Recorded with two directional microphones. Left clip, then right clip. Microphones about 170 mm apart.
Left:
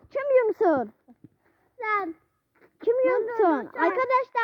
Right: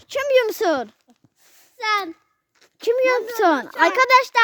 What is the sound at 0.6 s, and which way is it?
A child's voice, 25° right (ahead or behind).